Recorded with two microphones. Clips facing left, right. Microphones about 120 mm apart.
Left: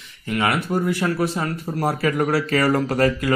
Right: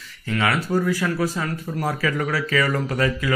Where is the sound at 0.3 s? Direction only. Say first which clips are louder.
Even; 25° left (ahead or behind).